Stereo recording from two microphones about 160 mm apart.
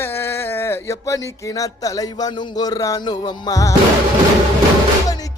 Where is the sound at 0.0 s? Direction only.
15° left (ahead or behind).